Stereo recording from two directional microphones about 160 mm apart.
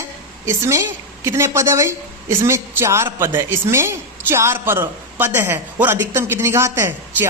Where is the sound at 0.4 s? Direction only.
15° right (ahead or behind).